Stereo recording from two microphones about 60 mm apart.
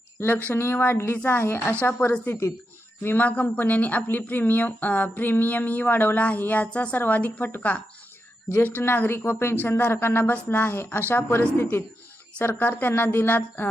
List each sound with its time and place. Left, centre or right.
0.2 s speech: left
1.2 s speech: left
1.5 s a woman's voice: left
8.8 s speech: left